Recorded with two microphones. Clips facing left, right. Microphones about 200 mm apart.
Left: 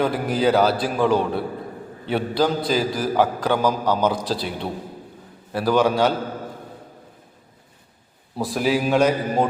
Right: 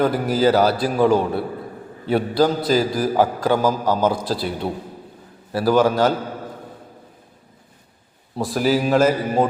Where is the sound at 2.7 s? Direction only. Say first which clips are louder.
Right 3 dB; 45° right (ahead or behind).